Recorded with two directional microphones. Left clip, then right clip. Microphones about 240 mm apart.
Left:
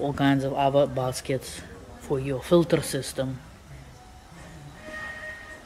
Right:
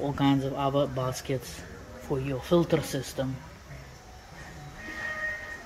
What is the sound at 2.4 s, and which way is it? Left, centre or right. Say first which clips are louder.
Speech: left 4 dB; left.